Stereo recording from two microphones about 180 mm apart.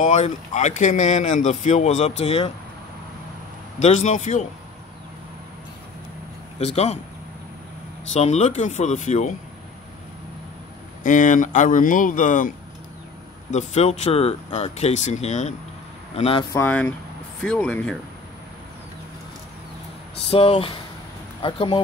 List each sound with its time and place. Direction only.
0.0 s speech: 40° left (ahead or behind)
3.8 s speech: 40° left (ahead or behind)
6.6 s speech: 35° left (ahead or behind)
8.1 s speech: 40° left (ahead or behind)
11.1 s speech: 45° left (ahead or behind)
16.5 s speech: 10° left (ahead or behind)
20.2 s speech: 30° left (ahead or behind)